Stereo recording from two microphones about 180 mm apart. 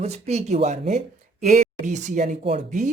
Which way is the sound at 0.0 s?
35° right (ahead or behind).